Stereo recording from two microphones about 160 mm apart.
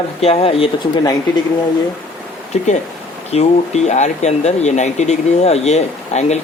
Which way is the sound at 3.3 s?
45° left (ahead or behind).